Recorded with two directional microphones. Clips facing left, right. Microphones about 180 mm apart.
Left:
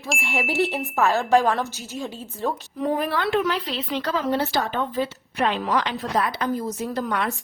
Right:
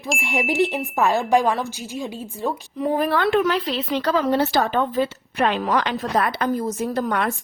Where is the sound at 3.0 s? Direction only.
50° right (ahead or behind).